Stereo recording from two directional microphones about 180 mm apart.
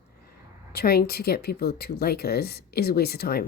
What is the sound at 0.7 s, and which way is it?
Speech, 60° left (ahead or behind).